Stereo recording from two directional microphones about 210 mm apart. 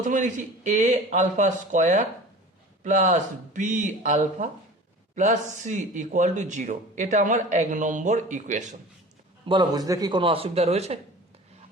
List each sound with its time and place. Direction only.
0.0 s speech: 35° right (ahead or behind)
9.5 s speech: 20° right (ahead or behind)